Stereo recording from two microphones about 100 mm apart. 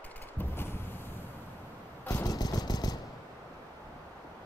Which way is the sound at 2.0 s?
35° left (ahead or behind).